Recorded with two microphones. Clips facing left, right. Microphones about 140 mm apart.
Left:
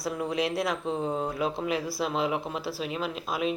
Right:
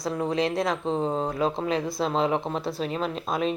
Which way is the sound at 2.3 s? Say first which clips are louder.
Right 4 dB; 35° right (ahead or behind).